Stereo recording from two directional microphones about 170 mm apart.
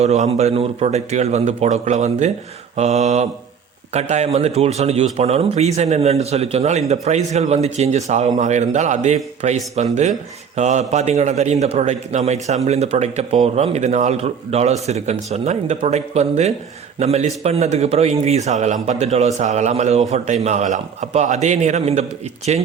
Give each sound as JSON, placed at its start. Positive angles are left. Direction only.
{"t": 0.0, "sound": "speech", "side_deg": -40}